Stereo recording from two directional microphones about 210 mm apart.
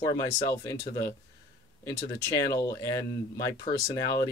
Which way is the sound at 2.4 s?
15° left (ahead or behind).